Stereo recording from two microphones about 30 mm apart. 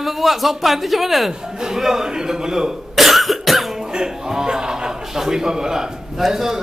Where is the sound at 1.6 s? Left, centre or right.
Centre.